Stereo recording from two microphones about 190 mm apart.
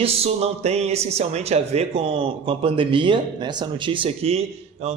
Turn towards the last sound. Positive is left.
turn(degrees=-35)  # may be behind; listen again after turning